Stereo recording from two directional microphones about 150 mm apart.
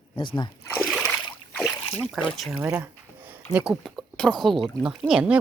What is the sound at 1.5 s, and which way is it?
Boat, centre (ahead or behind).